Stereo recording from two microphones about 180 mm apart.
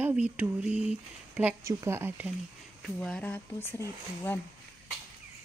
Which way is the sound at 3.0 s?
5° left (ahead or behind).